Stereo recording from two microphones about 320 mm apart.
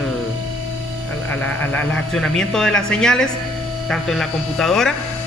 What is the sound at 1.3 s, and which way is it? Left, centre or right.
Speech, centre.